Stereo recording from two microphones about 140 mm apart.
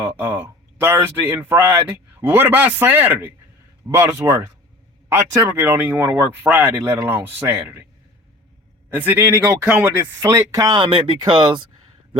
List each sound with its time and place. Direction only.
0.0 s a man's voice: 15° right (ahead or behind)
8.9 s speech: 15° right (ahead or behind); by 11.6 s 35° right (ahead or behind)